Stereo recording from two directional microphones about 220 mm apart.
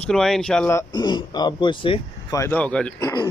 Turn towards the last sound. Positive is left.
turn(degrees=15)  # may be behind; listen again after turning